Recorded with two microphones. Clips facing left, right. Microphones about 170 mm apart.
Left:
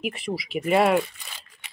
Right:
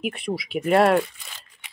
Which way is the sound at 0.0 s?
Centre (ahead or behind).